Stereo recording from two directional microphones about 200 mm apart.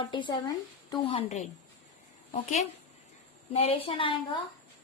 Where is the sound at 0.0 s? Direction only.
25° left (ahead or behind).